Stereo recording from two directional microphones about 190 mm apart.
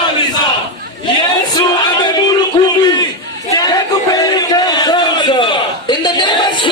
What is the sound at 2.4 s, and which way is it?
Music, 20° left (ahead or behind).